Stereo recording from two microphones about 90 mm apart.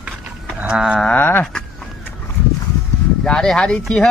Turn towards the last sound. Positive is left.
turn(degrees=10)  # may be behind; listen again after turning